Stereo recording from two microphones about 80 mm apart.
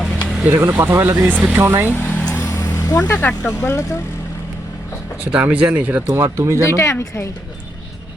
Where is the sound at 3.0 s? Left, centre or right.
Left.